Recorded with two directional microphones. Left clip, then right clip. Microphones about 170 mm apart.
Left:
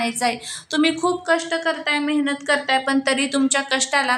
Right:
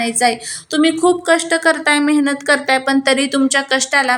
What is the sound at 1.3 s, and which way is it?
A woman's voice, 35° right (ahead or behind).